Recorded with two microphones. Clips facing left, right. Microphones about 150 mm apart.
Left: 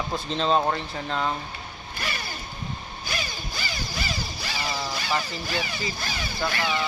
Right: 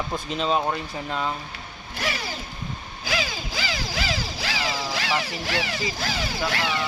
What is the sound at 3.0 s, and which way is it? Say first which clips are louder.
Music: right 6 dB; 90° right.